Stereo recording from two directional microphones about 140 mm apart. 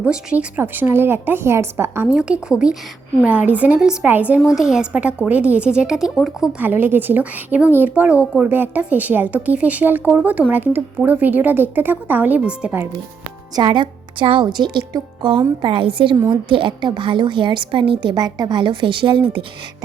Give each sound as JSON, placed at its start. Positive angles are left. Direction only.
{"t": 0.0, "sound": "speech", "side_deg": -10}
{"t": 2.1, "sound": "speech", "side_deg": -5}
{"t": 6.6, "sound": "speech", "side_deg": -15}
{"t": 13.6, "sound": "a woman's voice", "side_deg": -35}